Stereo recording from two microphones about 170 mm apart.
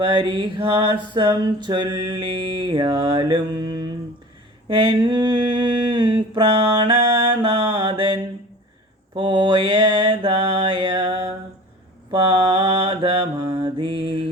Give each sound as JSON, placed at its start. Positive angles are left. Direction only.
{"t": 0.0, "sound": "a sound", "side_deg": -30}
{"t": 6.7, "sound": "music", "side_deg": -30}
{"t": 9.1, "sound": "mantra", "side_deg": -30}
{"t": 12.5, "sound": "mantra", "side_deg": -30}